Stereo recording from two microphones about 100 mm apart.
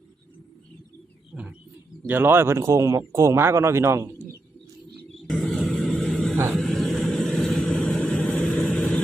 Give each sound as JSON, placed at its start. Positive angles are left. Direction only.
{"t": 2.0, "sound": "speech", "side_deg": -20}
{"t": 5.3, "sound": "vehicle", "side_deg": 5}